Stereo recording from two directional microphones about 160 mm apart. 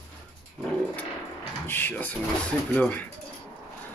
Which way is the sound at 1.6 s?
10° left (ahead or behind).